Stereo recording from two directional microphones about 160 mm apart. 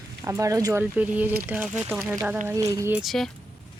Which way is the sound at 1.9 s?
Centre (ahead or behind).